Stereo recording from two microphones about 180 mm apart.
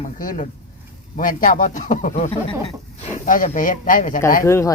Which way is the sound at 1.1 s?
45° left (ahead or behind).